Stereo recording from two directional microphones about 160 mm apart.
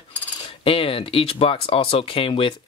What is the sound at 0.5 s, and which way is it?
Speech, 35° left (ahead or behind).